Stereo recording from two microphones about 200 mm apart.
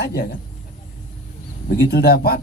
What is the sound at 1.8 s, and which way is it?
Speech, 50° left (ahead or behind).